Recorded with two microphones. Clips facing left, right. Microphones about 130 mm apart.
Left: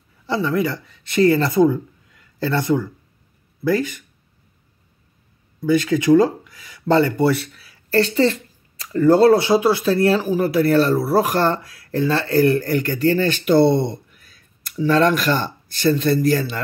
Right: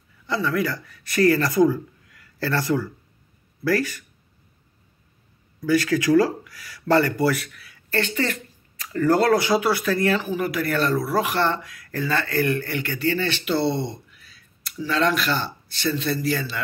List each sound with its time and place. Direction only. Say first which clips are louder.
0.3 s speech: left 3 dB; 25° left (ahead or behind)
5.6 s speech: left 3 dB; 20° left (ahead or behind); by 16.4 s 50° left (ahead or behind)